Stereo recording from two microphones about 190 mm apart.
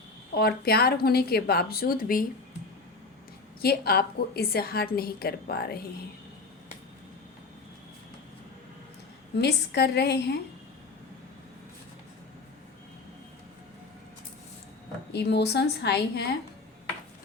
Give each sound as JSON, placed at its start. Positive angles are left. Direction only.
{"t": 0.3, "sound": "a woman's voice", "side_deg": 55}
{"t": 3.6, "sound": "a woman's voice", "side_deg": 55}
{"t": 9.4, "sound": "a woman's voice", "side_deg": 60}
{"t": 15.1, "sound": "a woman's voice", "side_deg": 60}